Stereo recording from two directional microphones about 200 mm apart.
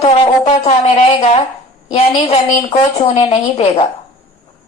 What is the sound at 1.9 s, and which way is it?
A woman's voice, 30° left (ahead or behind).